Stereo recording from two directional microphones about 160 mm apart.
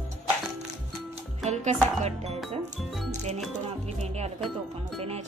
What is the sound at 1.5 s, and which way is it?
Music, 45° right (ahead or behind).